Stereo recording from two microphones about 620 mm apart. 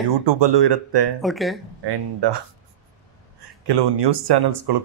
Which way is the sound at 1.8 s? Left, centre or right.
Right.